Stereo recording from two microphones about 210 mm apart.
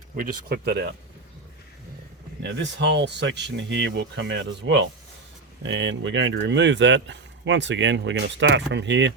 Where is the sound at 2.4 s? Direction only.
55° right (ahead or behind).